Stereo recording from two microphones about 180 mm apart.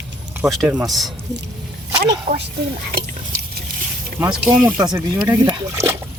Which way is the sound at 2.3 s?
50° right (ahead or behind).